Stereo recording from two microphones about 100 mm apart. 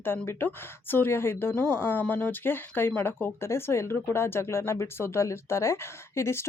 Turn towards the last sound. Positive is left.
turn(degrees=25)  # may be behind; listen again after turning